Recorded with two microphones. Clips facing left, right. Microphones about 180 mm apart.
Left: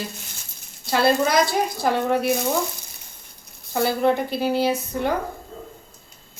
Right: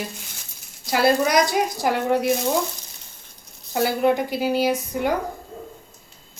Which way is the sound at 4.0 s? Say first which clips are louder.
Right 2 dB; 15° right (ahead or behind).